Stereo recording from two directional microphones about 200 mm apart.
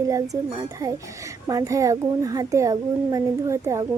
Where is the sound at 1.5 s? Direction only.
15° right (ahead or behind).